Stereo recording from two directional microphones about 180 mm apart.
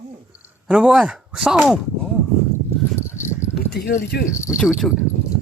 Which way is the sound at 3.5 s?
65° left (ahead or behind).